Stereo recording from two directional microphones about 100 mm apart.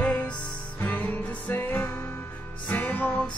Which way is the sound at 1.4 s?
20° left (ahead or behind).